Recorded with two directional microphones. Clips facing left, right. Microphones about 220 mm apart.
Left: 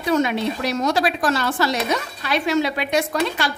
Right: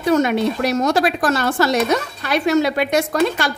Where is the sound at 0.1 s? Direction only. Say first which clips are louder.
Right 3 dB; 45° right (ahead or behind).